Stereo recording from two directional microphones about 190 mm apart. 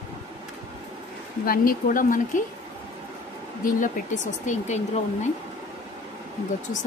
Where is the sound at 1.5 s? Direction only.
45° left (ahead or behind).